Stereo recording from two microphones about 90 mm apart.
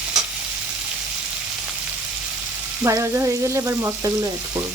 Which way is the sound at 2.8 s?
35° right (ahead or behind).